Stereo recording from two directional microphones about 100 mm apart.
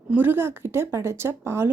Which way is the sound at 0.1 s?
20° right (ahead or behind).